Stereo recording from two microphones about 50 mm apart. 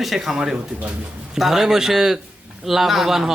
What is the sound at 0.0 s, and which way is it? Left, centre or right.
Speech, centre.